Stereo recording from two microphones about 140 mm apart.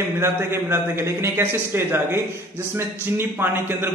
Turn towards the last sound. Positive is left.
turn(degrees=-15)  # may be behind; listen again after turning